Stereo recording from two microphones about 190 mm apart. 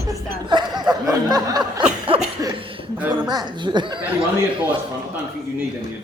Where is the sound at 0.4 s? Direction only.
25° right (ahead or behind).